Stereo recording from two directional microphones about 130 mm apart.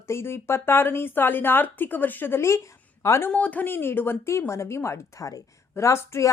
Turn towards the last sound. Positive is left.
turn(degrees=20)  # may be behind; listen again after turning